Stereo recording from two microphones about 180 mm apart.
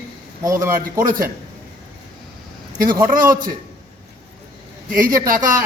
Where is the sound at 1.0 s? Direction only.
50° right (ahead or behind).